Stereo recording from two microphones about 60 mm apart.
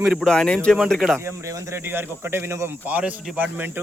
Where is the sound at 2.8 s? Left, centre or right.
Right.